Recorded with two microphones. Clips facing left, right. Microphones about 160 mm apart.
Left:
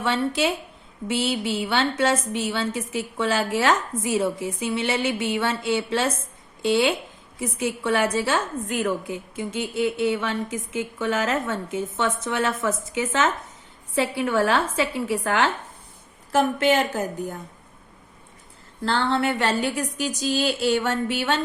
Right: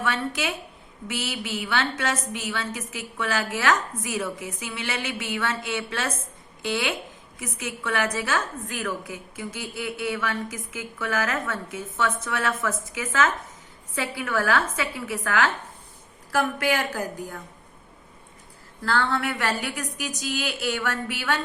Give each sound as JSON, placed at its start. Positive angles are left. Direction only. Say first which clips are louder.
{"t": 0.0, "sound": "a woman's voice", "louder": "left 5 dB", "side_deg": 30}
{"t": 18.8, "sound": "a woman's voice", "louder": "left 2 dB", "side_deg": 25}